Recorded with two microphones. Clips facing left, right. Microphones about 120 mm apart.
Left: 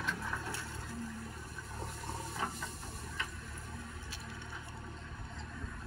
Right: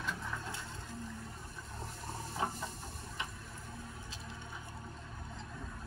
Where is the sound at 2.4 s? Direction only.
25° right (ahead or behind).